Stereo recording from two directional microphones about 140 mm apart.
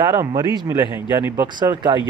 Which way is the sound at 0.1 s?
30° right (ahead or behind).